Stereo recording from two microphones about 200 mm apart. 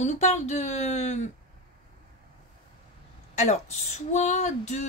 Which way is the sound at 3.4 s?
35° left (ahead or behind).